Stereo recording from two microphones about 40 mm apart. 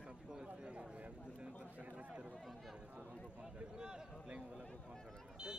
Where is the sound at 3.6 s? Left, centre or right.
Right.